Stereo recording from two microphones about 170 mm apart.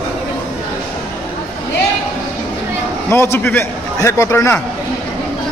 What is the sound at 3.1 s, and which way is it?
A man's voice, 15° left (ahead or behind).